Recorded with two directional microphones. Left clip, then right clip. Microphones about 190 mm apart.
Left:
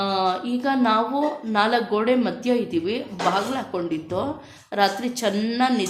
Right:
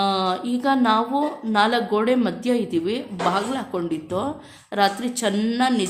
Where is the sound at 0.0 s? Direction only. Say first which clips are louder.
Right 1 dB; 20° right (ahead or behind).